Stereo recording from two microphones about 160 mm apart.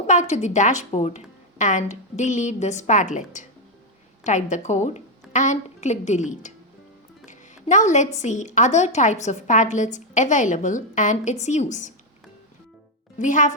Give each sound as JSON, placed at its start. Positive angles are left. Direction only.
{"t": 0.1, "sound": "a woman's voice", "side_deg": 50}
{"t": 13.1, "sound": "speech", "side_deg": 50}